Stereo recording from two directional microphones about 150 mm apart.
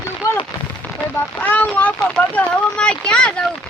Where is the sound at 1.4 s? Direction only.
10° left (ahead or behind).